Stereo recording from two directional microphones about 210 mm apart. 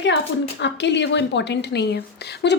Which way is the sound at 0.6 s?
55° left (ahead or behind).